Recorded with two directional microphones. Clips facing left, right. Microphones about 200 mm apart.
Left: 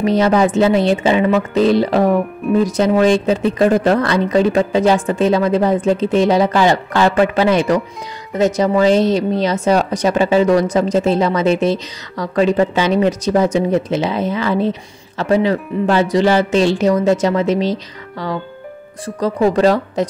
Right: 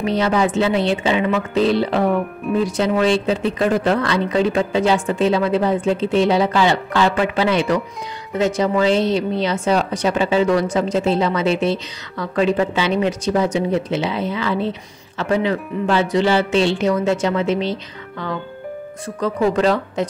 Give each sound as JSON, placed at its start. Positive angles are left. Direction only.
{"t": 0.0, "sound": "speech", "side_deg": 40}
{"t": 19.0, "sound": "speech", "side_deg": 35}